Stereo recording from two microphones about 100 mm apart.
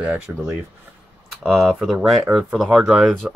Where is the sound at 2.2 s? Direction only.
15° right (ahead or behind).